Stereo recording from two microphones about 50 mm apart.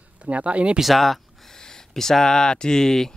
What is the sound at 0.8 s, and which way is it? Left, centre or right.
Speech, centre.